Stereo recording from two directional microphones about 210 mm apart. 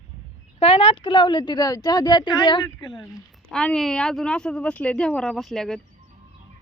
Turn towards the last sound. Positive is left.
turn(degrees=0)  # may be behind; listen again after turning